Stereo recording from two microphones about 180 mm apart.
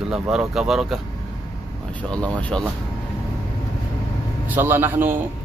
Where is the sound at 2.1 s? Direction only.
5° left (ahead or behind).